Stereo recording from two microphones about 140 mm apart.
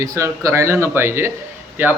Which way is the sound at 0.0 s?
25° right (ahead or behind).